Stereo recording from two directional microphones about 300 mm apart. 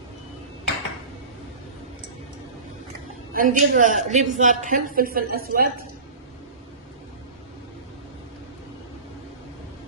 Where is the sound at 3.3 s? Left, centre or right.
Right.